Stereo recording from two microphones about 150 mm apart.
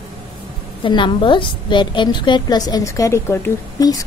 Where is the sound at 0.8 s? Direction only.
35° left (ahead or behind).